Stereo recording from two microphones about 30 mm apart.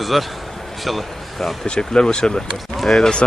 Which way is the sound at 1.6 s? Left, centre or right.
Left.